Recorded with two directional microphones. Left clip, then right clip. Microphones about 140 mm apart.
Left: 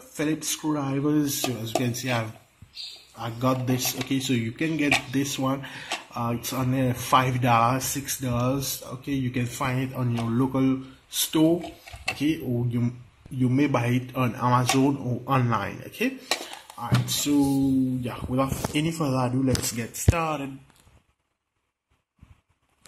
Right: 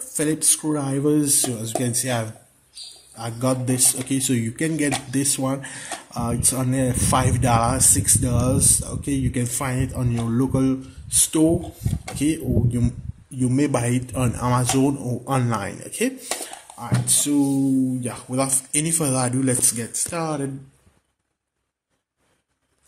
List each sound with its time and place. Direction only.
0.2 s speech: 30° right (ahead or behind)